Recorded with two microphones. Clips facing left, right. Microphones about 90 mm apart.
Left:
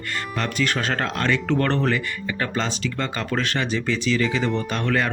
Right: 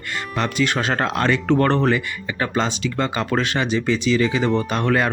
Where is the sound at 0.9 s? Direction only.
20° right (ahead or behind).